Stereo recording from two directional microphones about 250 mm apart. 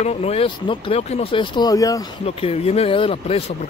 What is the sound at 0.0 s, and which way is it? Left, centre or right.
Speech, left.